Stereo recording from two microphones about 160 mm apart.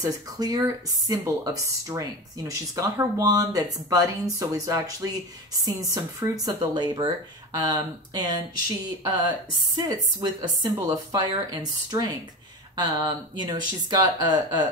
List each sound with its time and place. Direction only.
0.0 s speech: 25° right (ahead or behind)